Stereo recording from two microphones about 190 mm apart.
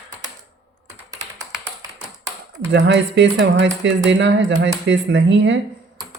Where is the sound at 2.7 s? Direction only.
65° right (ahead or behind).